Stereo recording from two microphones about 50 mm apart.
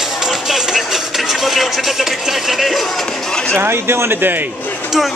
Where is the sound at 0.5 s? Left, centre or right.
Centre.